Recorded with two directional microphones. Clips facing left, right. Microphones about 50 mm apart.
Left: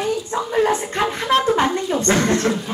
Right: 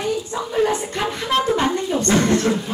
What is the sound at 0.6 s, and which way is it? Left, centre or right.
A woman's voice, left.